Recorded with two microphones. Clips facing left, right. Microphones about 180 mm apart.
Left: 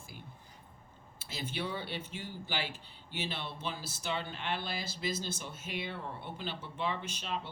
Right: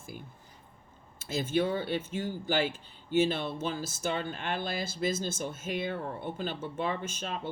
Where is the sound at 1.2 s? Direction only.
50° right (ahead or behind).